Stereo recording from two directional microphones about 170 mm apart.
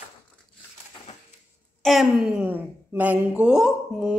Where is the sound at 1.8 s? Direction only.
Centre (ahead or behind).